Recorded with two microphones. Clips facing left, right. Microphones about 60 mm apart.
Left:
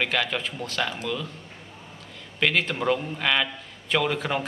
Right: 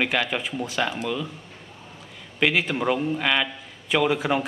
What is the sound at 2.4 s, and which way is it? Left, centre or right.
A man's voice, centre.